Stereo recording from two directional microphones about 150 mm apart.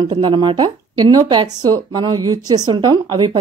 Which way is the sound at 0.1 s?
35° right (ahead or behind).